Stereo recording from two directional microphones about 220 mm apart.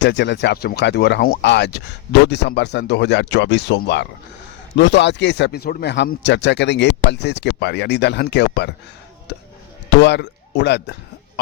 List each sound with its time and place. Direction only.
0.0 s speech: 50° left (ahead or behind)
9.9 s speech: 50° left (ahead or behind)